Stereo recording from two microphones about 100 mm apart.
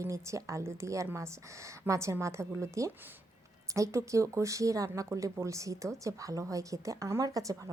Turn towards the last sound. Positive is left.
turn(degrees=-35)  # may be behind; listen again after turning